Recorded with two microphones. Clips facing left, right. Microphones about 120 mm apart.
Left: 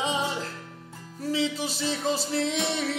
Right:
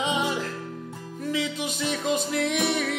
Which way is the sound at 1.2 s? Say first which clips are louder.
Left 1 dB; 30° left (ahead or behind).